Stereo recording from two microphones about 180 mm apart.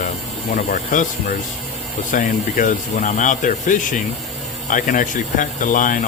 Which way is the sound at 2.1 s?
45° left (ahead or behind).